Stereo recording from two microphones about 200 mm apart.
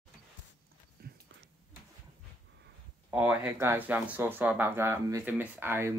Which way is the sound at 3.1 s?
10° right (ahead or behind).